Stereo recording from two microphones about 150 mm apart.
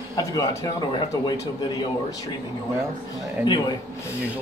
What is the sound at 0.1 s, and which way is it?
Speech, 25° left (ahead or behind).